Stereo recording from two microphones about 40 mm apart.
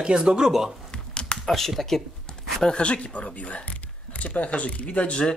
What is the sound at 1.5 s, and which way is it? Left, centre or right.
Speech, centre.